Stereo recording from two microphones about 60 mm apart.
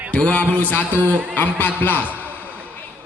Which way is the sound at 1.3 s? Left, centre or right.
Left.